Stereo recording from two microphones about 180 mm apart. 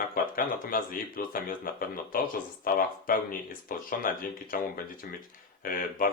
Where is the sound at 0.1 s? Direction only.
50° left (ahead or behind).